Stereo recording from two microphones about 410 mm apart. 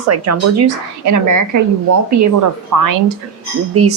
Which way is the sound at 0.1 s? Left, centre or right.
Right.